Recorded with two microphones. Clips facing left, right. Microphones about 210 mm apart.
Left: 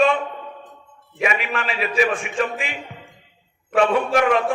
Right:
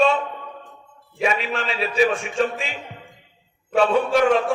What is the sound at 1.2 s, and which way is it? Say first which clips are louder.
Speech: even; 30° right (ahead or behind).